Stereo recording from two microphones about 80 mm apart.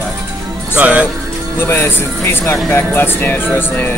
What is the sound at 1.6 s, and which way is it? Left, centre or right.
Speech, left.